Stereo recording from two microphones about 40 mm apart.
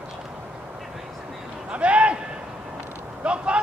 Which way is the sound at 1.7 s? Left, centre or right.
Right.